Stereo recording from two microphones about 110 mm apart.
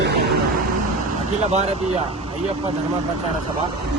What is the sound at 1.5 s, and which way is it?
Speech, 85° right.